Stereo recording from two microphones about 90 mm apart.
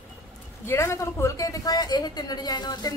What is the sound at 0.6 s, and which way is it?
A woman's voice, 30° left (ahead or behind).